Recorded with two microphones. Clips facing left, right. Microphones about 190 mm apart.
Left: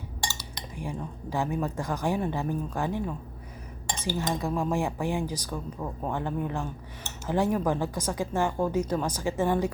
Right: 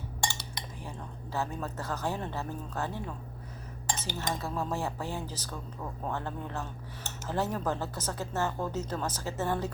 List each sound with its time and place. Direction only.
0.3 s cutlery: 55° right (ahead or behind)
0.8 s speech: 15° left (ahead or behind)